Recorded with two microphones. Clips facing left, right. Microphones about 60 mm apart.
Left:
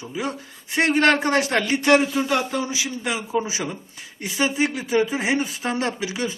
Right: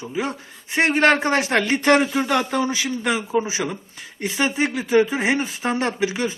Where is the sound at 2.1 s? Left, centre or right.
Right.